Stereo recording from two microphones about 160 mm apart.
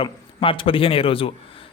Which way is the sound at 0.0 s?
35° left (ahead or behind).